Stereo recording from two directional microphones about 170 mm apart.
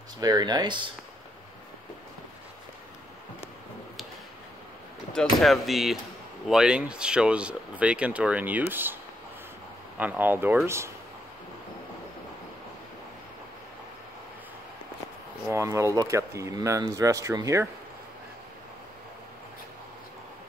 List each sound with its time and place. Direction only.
0.2 s speech: 25° right (ahead or behind)
5.1 s speech: centre (ahead or behind)
9.9 s speech: 10° right (ahead or behind)
15.4 s speech: 15° right (ahead or behind)